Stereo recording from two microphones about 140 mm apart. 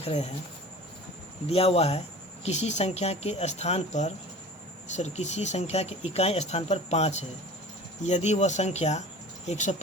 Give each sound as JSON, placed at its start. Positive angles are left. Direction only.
{"t": 0.0, "sound": "speech", "side_deg": 45}
{"t": 1.5, "sound": "speech", "side_deg": 45}